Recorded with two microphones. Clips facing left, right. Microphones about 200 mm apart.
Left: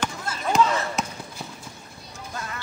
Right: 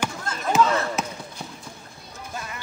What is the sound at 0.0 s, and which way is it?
Chop, 5° right (ahead or behind).